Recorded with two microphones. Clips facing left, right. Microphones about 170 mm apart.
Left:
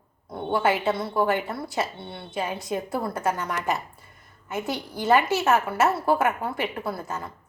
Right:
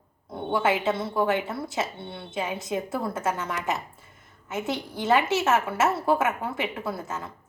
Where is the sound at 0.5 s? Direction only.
20° right (ahead or behind).